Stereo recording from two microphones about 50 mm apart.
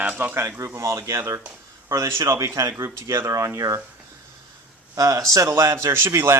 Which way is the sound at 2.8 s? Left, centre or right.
Right.